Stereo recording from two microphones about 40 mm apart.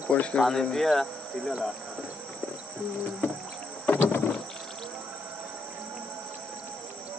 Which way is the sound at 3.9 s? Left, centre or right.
Left.